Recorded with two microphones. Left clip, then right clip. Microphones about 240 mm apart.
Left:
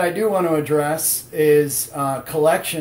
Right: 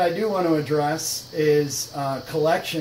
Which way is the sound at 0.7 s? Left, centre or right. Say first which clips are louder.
Left 3 dB; left.